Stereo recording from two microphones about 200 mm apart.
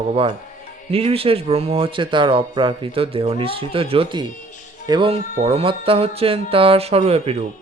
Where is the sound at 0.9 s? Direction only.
30° right (ahead or behind).